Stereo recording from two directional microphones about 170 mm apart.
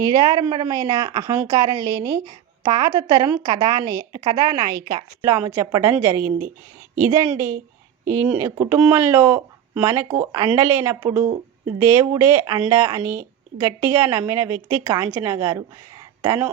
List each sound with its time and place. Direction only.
0.1 s a woman's voice: 20° right (ahead or behind)